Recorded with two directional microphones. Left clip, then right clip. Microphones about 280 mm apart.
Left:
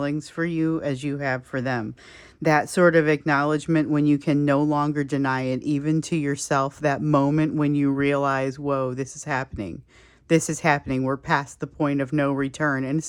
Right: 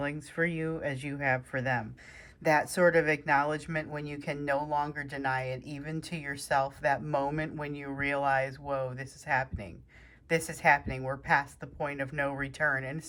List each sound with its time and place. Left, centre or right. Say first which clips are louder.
0.0 s speech: left 5 dB; centre